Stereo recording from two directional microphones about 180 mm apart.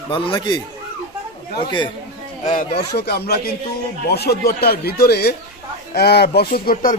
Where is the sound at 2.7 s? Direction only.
65° left (ahead or behind).